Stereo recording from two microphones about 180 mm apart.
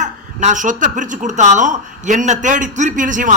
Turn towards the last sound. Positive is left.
turn(degrees=-45)  # may be behind; listen again after turning